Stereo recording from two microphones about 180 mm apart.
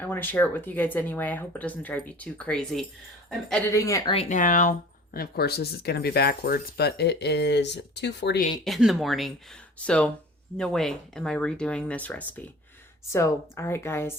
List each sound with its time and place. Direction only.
0.0 s speech: 10° left (ahead or behind)
3.7 s speech: 15° left (ahead or behind)
4.1 s speech: 40° left (ahead or behind); by 8.4 s 70° left (ahead or behind)
8.6 s speech: centre (ahead or behind)